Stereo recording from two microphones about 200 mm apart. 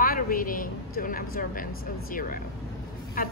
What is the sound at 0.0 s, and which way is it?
A woman's voice, 45° left (ahead or behind).